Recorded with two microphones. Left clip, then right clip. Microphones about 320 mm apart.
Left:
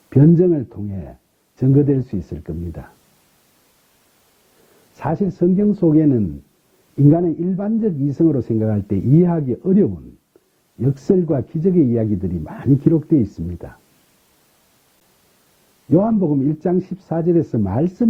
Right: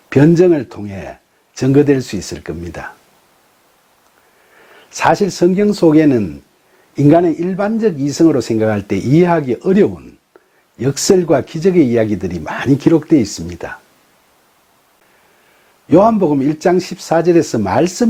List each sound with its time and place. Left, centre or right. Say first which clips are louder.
0.1 s speech: right 5 dB; centre
4.9 s speech: right 9 dB; centre
16.0 s speech: right 8 dB; right
16.5 s speech: right 7 dB; centre